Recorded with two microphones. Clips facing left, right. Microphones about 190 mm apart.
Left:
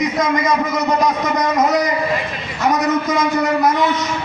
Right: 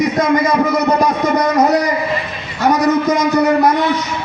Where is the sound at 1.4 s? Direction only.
35° right (ahead or behind).